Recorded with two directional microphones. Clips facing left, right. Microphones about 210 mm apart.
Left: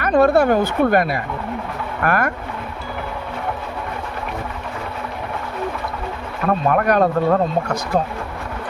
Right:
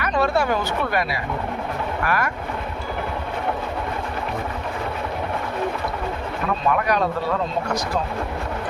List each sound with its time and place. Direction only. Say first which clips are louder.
0.0 s a woman's voice: left 7 dB; 55° left (ahead or behind)
6.5 s speech: left 5 dB; 50° left (ahead or behind)